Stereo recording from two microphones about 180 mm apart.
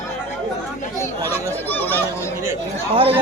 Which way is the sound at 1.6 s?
10° left (ahead or behind).